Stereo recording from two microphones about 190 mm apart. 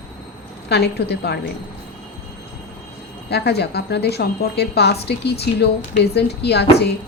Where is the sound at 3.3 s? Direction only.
60° left (ahead or behind).